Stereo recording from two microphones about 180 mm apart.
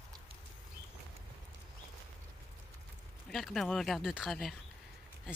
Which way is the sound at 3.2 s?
Centre (ahead or behind).